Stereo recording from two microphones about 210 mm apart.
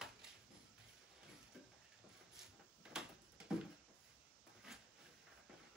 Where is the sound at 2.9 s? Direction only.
5° right (ahead or behind).